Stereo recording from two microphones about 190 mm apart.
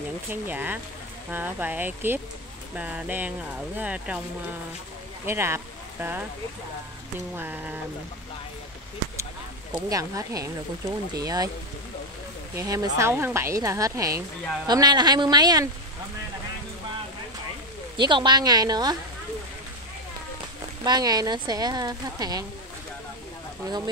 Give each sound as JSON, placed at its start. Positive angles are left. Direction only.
{"t": 0.3, "sound": "speech", "side_deg": -10}
{"t": 5.2, "sound": "speech", "side_deg": -15}
{"t": 7.3, "sound": "speech", "side_deg": -10}
{"t": 9.8, "sound": "speech", "side_deg": -20}
{"t": 12.5, "sound": "speech", "side_deg": -20}
{"t": 17.9, "sound": "speech", "side_deg": -25}
{"t": 20.8, "sound": "speech", "side_deg": -20}